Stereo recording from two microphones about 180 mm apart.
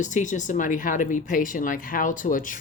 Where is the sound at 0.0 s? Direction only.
45° left (ahead or behind).